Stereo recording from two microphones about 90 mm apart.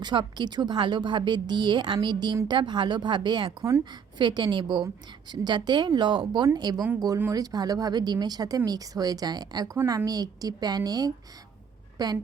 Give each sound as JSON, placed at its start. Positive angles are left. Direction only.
{"t": 0.0, "sound": "a woman's voice", "side_deg": -55}